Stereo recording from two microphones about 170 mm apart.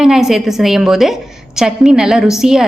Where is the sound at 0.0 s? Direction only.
5° right (ahead or behind).